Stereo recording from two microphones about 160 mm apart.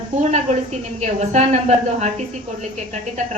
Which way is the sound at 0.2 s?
45° right (ahead or behind).